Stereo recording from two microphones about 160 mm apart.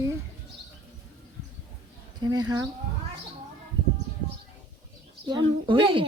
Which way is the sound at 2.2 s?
25° right (ahead or behind).